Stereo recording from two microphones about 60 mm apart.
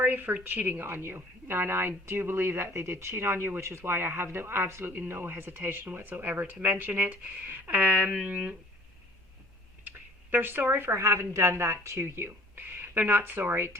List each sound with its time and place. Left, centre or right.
0.0 s speech: right
10.3 s speech: right